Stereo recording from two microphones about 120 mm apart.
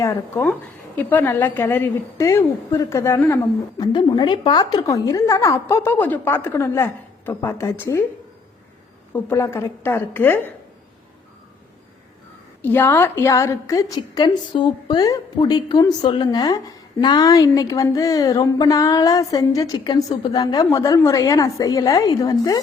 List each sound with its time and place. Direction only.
0.0 s a woman's voice: 25° left (ahead or behind)
3.8 s a woman's voice: 40° left (ahead or behind); by 8.0 s 20° left (ahead or behind)
9.1 s a woman's voice: 20° left (ahead or behind)
12.6 s a woman's voice: 15° left (ahead or behind)
14.5 s a woman's voice: 40° left (ahead or behind)